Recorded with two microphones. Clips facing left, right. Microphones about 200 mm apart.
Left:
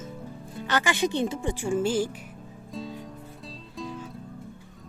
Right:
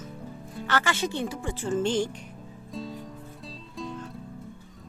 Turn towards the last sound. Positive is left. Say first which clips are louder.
# even
turn(degrees=0)  # may be behind; listen again after turning